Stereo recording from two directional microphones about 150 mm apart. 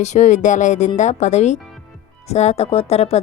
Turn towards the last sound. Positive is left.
turn(degrees=45)  # may be behind; listen again after turning